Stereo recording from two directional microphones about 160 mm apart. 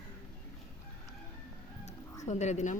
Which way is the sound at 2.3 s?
45° left (ahead or behind).